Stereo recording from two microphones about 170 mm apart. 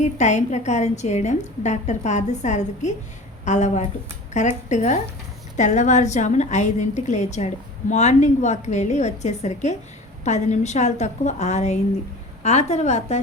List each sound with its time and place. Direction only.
0.0 s a woman's voice: 45° left (ahead or behind)